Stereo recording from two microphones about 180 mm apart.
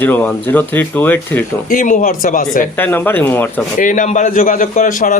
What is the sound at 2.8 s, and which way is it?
Speech, 10° left (ahead or behind).